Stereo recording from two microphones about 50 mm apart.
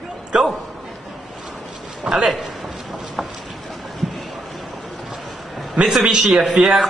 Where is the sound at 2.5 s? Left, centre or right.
Centre.